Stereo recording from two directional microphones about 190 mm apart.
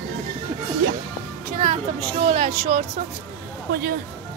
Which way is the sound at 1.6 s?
35° right (ahead or behind).